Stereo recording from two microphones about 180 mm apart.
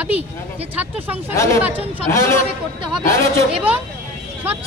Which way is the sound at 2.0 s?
15° left (ahead or behind).